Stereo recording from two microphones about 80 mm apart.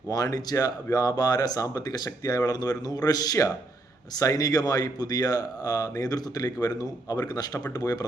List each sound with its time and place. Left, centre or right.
0.1 s speech: left